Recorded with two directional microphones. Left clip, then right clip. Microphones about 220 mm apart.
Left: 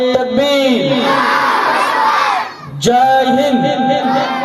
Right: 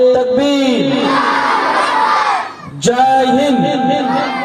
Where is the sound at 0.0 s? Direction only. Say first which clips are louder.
Right 2 dB; 45° left (ahead or behind).